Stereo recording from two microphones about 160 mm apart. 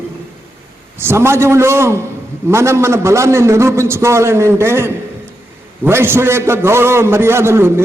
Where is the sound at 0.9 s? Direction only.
15° right (ahead or behind).